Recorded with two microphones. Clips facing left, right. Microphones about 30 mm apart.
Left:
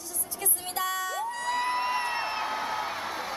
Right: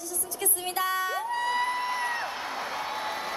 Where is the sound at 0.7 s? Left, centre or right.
Centre.